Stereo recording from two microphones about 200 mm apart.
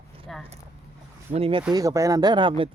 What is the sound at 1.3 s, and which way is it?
Speech, 30° right (ahead or behind).